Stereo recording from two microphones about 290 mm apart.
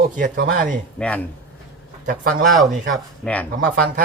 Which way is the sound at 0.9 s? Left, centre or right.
Centre.